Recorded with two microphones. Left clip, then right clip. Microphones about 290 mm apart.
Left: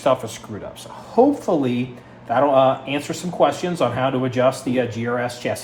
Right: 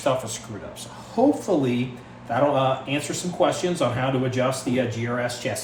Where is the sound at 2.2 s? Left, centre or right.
Left.